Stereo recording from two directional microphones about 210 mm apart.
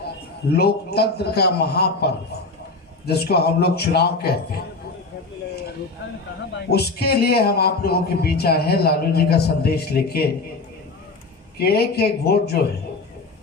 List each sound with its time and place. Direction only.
0.5 s a man's voice: 50° left (ahead or behind)
6.5 s a man's voice: 50° left (ahead or behind)
11.5 s a man's voice: 50° left (ahead or behind)